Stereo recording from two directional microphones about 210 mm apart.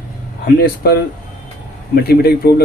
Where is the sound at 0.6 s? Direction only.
45° left (ahead or behind).